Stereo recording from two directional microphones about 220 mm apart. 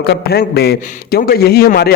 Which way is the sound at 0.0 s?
45° left (ahead or behind).